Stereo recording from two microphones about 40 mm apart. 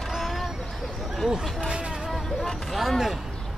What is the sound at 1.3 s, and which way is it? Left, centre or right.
Speech, centre.